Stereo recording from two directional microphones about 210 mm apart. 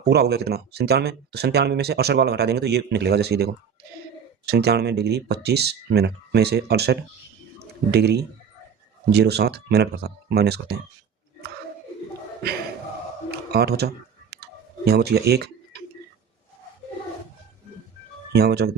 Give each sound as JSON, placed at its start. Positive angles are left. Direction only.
{"t": 0.1, "sound": "speech", "side_deg": -50}
{"t": 4.5, "sound": "speech", "side_deg": -50}
{"t": 13.5, "sound": "clicking", "side_deg": -50}
{"t": 18.3, "sound": "speech", "side_deg": -50}